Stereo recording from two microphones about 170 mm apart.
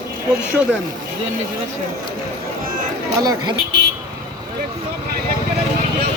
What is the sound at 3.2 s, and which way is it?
Speech, 20° right (ahead or behind).